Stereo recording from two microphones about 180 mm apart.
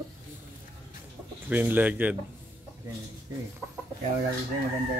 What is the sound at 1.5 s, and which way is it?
Speech, 10° right (ahead or behind).